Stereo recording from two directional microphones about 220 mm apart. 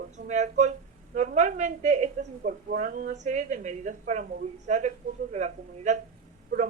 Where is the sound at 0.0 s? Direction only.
30° right (ahead or behind).